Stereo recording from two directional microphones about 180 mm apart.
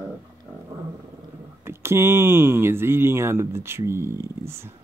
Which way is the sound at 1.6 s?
15° right (ahead or behind).